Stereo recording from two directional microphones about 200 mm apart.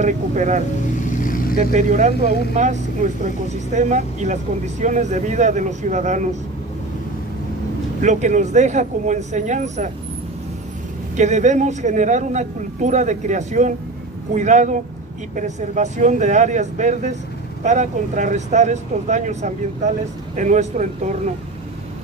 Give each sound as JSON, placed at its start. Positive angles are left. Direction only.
{"t": 0.0, "sound": "speech", "side_deg": -35}
{"t": 1.1, "sound": "vehicle", "side_deg": 40}
{"t": 1.6, "sound": "speech", "side_deg": -40}
{"t": 3.7, "sound": "speech", "side_deg": -35}
{"t": 8.0, "sound": "speech", "side_deg": -35}
{"t": 11.1, "sound": "speech", "side_deg": -35}